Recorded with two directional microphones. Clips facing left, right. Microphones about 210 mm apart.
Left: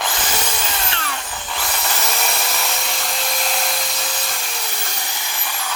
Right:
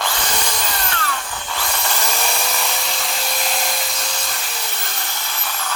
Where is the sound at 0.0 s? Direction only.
5° left (ahead or behind).